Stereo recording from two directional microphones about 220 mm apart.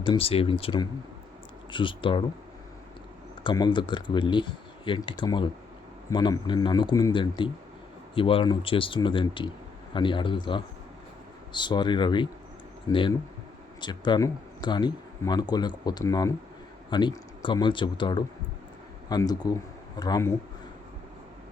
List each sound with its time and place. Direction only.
0.0 s speech: 25° left (ahead or behind)
3.4 s speech: 20° left (ahead or behind)